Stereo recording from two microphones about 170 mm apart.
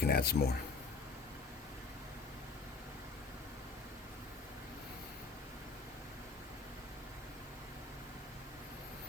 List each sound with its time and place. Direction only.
0.0 s speech: 65° left (ahead or behind)